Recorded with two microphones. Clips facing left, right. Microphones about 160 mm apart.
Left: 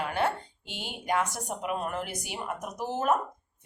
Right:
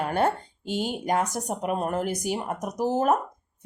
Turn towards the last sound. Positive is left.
turn(degrees=-40)  # may be behind; listen again after turning